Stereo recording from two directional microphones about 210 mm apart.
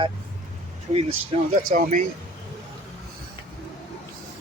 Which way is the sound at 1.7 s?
40° right (ahead or behind).